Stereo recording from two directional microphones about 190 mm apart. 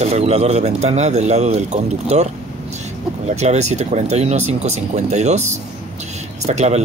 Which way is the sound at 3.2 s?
35° right (ahead or behind).